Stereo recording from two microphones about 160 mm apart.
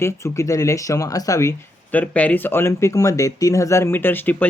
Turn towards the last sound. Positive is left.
turn(degrees=10)  # may be behind; listen again after turning